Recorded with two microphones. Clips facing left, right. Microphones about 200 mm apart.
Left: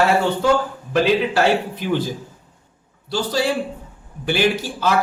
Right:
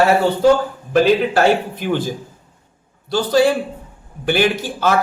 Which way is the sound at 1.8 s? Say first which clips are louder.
Right 2 dB; 50° right (ahead or behind).